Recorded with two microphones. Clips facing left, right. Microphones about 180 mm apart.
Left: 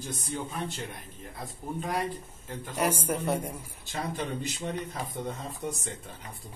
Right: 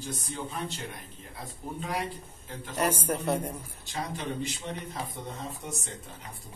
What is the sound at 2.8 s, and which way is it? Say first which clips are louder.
Speech: even; 10° left (ahead or behind).